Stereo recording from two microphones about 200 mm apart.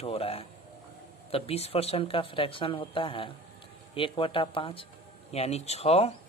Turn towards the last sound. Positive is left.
turn(degrees=30)  # may be behind; listen again after turning